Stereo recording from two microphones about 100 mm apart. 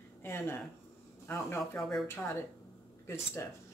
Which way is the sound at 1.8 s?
Centre (ahead or behind).